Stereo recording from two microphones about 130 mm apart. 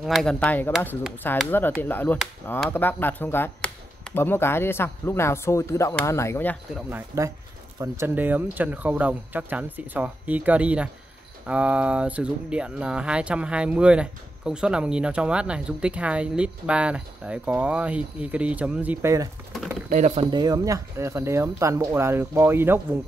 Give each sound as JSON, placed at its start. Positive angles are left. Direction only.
{"t": 0.0, "sound": "speech", "side_deg": 0}
{"t": 6.9, "sound": "speech", "side_deg": -20}
{"t": 19.9, "sound": "speech", "side_deg": -65}
{"t": 20.2, "sound": "speech", "side_deg": -35}